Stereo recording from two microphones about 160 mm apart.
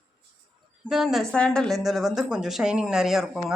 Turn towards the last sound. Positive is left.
turn(degrees=0)  # may be behind; listen again after turning